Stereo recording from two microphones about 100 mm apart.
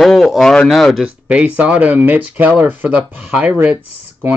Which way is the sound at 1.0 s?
15° right (ahead or behind).